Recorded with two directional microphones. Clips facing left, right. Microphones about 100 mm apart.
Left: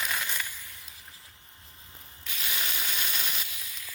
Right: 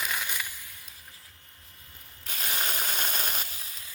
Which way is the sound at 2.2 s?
45° right (ahead or behind).